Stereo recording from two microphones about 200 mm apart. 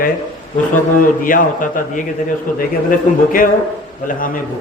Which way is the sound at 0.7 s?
45° left (ahead or behind).